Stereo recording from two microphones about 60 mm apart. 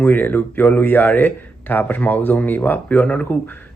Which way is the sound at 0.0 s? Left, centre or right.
Left.